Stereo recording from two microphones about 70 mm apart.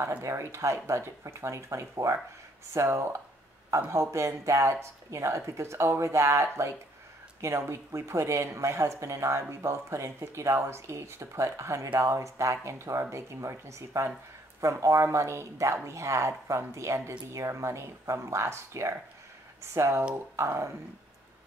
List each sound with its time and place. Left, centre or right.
0.2 s speech: right